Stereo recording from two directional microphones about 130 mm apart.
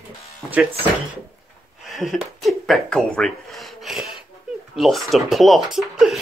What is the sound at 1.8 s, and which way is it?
Speech, centre (ahead or behind).